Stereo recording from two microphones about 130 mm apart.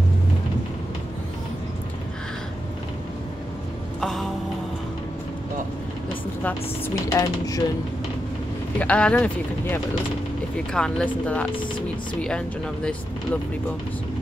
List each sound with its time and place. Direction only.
4.0 s music: centre (ahead or behind)
7.1 s speech: 25° left (ahead or behind)
8.7 s speech: 10° left (ahead or behind)